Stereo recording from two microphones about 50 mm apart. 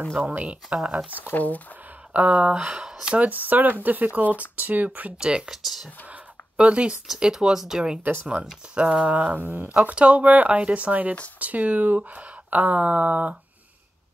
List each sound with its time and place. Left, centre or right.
0.1 s speech: right
0.4 s speech: right
1.3 s speech: left
2.1 s speech: right
2.6 s speech: centre
3.2 s speech: right
5.2 s speech: centre
8.0 s speech: right
8.7 s speech: centre
9.1 s speech: right